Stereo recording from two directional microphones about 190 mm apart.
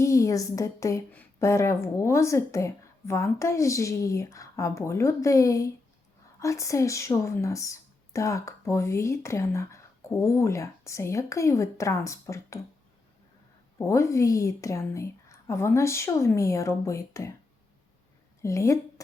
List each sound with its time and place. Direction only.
0.0 s a woman's voice: 15° left (ahead or behind)
13.7 s a woman's voice: 15° left (ahead or behind)
18.4 s a woman's voice: 15° left (ahead or behind)